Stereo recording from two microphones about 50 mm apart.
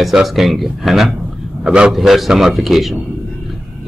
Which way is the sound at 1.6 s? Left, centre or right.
Centre.